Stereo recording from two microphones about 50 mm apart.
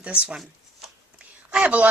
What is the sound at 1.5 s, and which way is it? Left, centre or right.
Speech, right.